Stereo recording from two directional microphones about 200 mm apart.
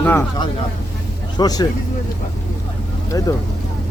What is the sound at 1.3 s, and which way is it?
Speech, 20° left (ahead or behind).